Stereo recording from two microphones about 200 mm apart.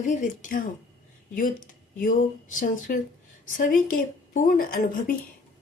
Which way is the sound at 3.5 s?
40° left (ahead or behind).